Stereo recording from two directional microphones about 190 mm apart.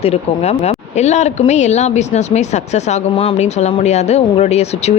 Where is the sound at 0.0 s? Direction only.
35° left (ahead or behind).